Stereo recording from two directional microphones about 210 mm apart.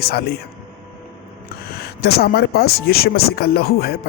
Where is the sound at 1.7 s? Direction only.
50° left (ahead or behind).